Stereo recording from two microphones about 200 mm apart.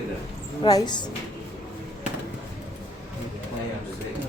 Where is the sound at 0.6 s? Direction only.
20° left (ahead or behind).